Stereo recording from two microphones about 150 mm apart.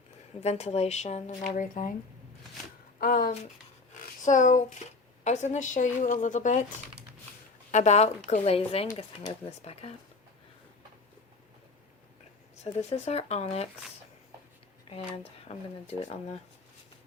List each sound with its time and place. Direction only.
0.4 s a woman's voice: 45° left (ahead or behind)
3.0 s speech: 70° left (ahead or behind)
4.2 s a woman's voice: 55° left (ahead or behind)
7.7 s speech: 50° left (ahead or behind)
12.6 s speech: 40° left (ahead or behind)
14.8 s speech: 40° left (ahead or behind)